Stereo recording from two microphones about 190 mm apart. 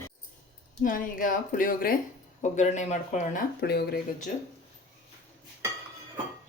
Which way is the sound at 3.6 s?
55° left (ahead or behind).